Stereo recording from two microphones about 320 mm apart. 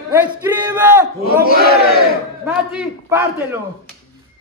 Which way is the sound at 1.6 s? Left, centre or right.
Left.